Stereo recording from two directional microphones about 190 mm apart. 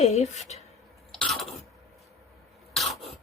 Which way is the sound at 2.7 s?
Centre (ahead or behind).